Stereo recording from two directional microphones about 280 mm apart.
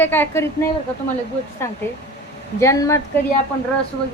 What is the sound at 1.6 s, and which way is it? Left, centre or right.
A woman's voice, centre.